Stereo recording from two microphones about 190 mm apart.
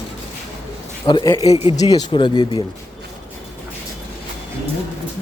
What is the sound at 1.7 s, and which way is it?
Speech, 20° left (ahead or behind).